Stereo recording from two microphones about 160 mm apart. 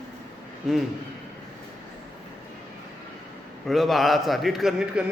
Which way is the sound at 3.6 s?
Centre (ahead or behind).